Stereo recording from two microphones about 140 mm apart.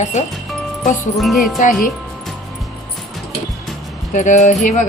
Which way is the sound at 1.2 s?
Centre (ahead or behind).